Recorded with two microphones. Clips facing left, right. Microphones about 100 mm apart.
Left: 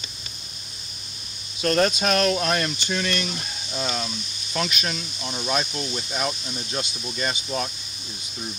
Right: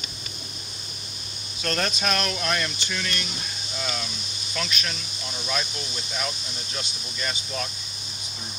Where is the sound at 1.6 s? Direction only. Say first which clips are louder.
Left 6 dB; 25° left (ahead or behind).